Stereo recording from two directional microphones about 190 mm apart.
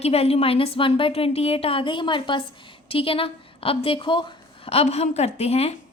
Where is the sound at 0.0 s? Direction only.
35° left (ahead or behind).